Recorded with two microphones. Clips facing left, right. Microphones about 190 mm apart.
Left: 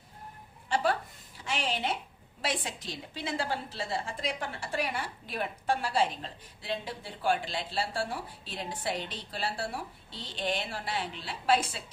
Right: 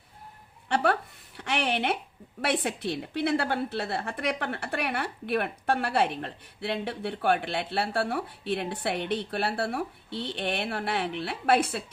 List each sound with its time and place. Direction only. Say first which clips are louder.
0.7 s a woman's voice: right 3 dB; 60° right (ahead or behind)